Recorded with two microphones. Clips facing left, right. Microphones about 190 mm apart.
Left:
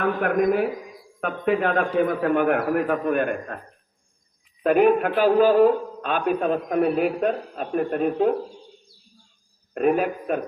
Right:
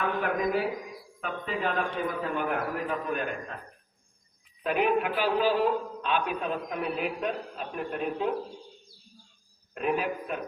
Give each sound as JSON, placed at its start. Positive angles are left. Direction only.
{"t": 0.2, "sound": "a man's voice", "side_deg": 55}
{"t": 4.6, "sound": "a man's voice", "side_deg": 50}
{"t": 9.7, "sound": "a man's voice", "side_deg": 50}